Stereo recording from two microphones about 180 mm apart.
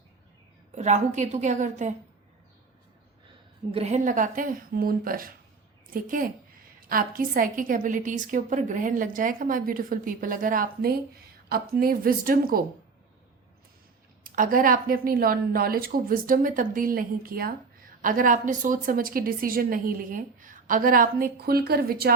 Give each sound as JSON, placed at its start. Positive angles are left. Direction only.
{"t": 0.8, "sound": "a woman's voice", "side_deg": -40}
{"t": 3.7, "sound": "a woman's voice", "side_deg": -35}
{"t": 14.3, "sound": "a woman's voice", "side_deg": -50}